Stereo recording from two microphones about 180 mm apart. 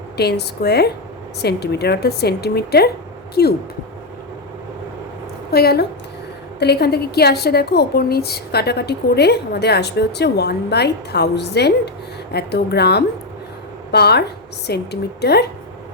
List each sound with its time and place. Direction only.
0.2 s a woman's voice: 65° left (ahead or behind)
5.5 s a woman's voice: 60° left (ahead or behind)